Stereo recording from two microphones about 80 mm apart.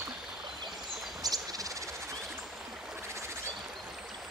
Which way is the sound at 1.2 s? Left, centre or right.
Right.